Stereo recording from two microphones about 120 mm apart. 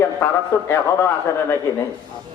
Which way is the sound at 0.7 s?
20° left (ahead or behind).